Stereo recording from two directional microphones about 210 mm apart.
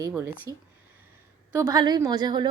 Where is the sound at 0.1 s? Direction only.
10° right (ahead or behind).